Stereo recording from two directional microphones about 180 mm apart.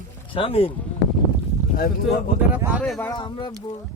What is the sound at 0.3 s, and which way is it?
Speech, 30° left (ahead or behind).